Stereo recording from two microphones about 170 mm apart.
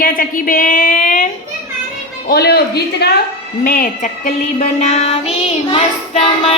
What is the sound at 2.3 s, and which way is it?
Speech, 70° left (ahead or behind).